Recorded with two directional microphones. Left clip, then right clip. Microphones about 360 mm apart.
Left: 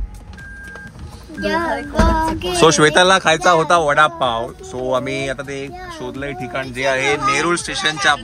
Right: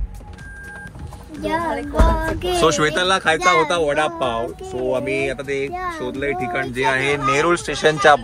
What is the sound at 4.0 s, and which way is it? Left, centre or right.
Speech, left.